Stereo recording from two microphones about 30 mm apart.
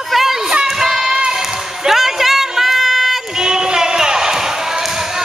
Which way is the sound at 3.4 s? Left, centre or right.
Right.